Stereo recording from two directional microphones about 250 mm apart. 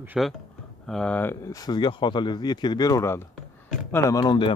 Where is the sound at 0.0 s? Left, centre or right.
Centre.